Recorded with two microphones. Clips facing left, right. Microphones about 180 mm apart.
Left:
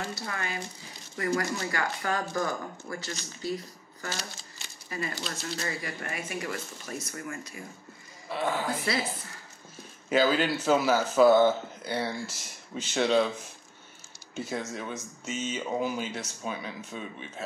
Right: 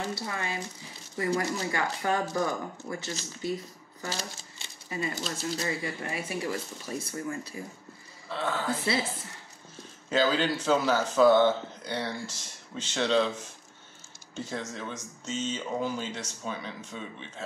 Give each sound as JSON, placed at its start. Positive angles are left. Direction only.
{"t": 0.1, "sound": "speech", "side_deg": -25}
{"t": 8.3, "sound": "speech", "side_deg": 10}
{"t": 10.0, "sound": "speech", "side_deg": 10}
{"t": 14.3, "sound": "speech", "side_deg": 10}